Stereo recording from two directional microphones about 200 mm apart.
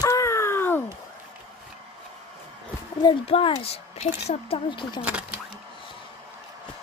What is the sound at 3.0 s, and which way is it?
Speech, 25° left (ahead or behind).